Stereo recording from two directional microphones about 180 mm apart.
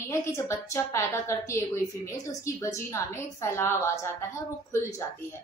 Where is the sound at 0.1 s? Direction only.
15° left (ahead or behind).